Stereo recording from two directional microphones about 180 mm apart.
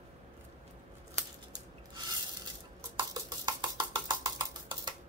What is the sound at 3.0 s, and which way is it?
Percussion, 20° right (ahead or behind).